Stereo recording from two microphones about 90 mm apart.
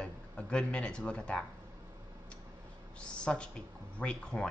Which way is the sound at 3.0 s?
10° left (ahead or behind).